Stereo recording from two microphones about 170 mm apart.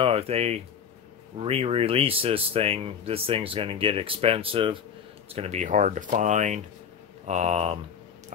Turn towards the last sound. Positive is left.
turn(degrees=-40)  # may be behind; listen again after turning